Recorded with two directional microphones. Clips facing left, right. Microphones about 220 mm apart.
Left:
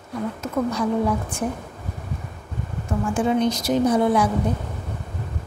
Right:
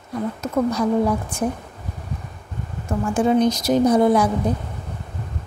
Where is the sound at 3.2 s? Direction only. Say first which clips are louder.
Right 4 dB; 40° right (ahead or behind).